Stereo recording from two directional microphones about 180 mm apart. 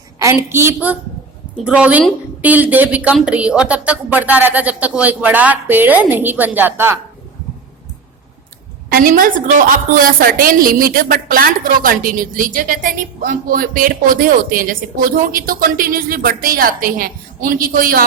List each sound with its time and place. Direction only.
0.5 s a woman's voice: 15° right (ahead or behind)
8.9 s a woman's voice: 50° right (ahead or behind)